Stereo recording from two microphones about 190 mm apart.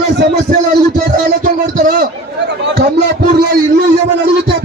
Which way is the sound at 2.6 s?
60° right (ahead or behind).